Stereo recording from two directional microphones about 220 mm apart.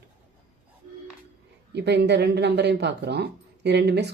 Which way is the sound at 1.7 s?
50° right (ahead or behind).